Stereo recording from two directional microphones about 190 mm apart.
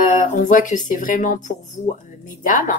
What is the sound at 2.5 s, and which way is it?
Speech, 45° left (ahead or behind).